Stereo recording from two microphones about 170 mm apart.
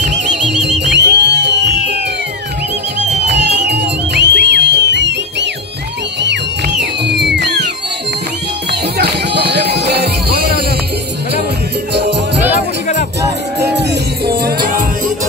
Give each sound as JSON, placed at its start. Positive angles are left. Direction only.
{"t": 0.0, "sound": "music", "side_deg": -90}
{"t": 3.3, "sound": "music", "side_deg": -85}
{"t": 6.8, "sound": "music", "side_deg": -85}
{"t": 8.9, "sound": "music", "side_deg": -75}
{"t": 11.9, "sound": "music", "side_deg": -80}
{"t": 13.6, "sound": "music", "side_deg": -75}
{"t": 14.4, "sound": "music", "side_deg": -55}